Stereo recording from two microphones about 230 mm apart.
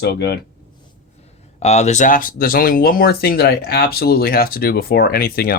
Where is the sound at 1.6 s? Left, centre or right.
Left.